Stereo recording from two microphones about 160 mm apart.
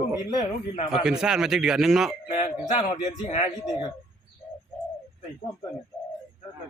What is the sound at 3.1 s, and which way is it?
Speech, 50° left (ahead or behind).